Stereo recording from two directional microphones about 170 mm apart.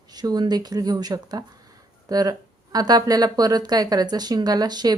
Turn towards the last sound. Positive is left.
turn(degrees=-25)  # may be behind; listen again after turning